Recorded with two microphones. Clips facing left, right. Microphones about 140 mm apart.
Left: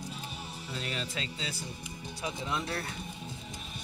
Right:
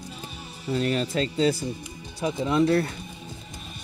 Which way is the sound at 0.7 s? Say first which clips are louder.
Right 13 dB; 50° right (ahead or behind).